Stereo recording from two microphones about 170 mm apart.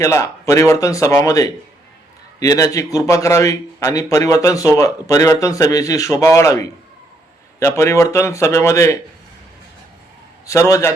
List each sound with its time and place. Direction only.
0.0 s a man's voice: 15° left (ahead or behind)
10.4 s speech: 20° left (ahead or behind)